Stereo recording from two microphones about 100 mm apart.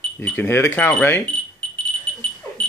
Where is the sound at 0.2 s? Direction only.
20° left (ahead or behind).